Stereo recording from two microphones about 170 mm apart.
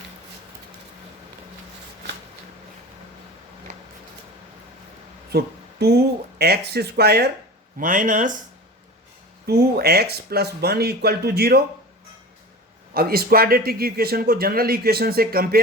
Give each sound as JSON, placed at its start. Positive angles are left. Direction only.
{"t": 3.7, "sound": "a sound", "side_deg": -45}
{"t": 5.3, "sound": "speech", "side_deg": -70}
{"t": 7.8, "sound": "speech", "side_deg": -50}
{"t": 9.5, "sound": "speech", "side_deg": -65}
{"t": 12.9, "sound": "speech", "side_deg": -60}